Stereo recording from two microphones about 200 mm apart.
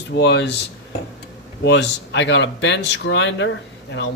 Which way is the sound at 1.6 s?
60° left (ahead or behind).